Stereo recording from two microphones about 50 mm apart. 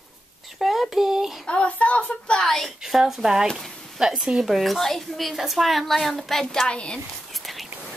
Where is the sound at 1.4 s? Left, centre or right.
Left.